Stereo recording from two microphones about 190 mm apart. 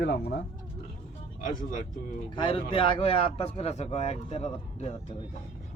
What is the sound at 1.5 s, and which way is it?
Speech, 45° left (ahead or behind).